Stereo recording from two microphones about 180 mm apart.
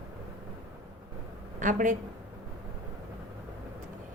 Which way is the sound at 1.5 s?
45° right (ahead or behind).